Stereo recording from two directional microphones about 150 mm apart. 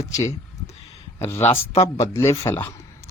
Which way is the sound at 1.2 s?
15° left (ahead or behind).